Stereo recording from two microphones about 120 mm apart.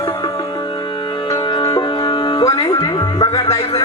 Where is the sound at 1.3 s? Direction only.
40° left (ahead or behind).